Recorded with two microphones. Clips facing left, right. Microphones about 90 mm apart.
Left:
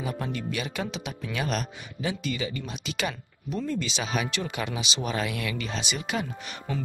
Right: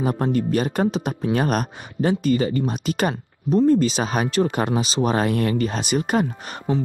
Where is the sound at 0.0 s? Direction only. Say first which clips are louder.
Right 10 dB; 45° right (ahead or behind).